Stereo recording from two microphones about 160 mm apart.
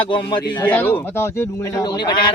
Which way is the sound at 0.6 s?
10° left (ahead or behind).